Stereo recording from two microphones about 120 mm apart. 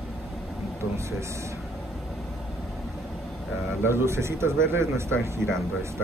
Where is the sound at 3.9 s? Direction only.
20° right (ahead or behind).